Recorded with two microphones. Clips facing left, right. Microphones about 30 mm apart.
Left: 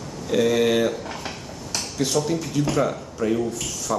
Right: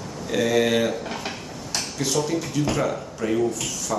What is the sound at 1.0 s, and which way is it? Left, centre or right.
Dishes, right.